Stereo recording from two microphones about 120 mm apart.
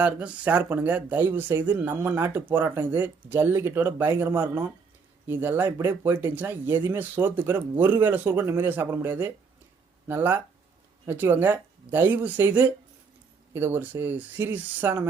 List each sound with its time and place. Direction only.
0.0 s speech: 10° right (ahead or behind)